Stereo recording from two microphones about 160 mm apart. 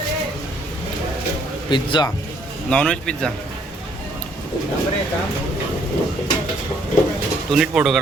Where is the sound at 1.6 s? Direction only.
30° left (ahead or behind).